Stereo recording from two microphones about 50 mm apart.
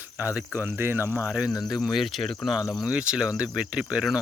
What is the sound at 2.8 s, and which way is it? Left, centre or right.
Speech, right.